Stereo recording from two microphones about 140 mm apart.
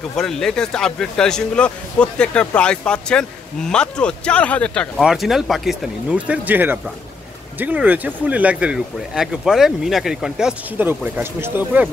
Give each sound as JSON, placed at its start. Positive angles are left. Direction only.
{"t": 0.1, "sound": "speech", "side_deg": 5}
{"t": 4.9, "sound": "speech", "side_deg": -5}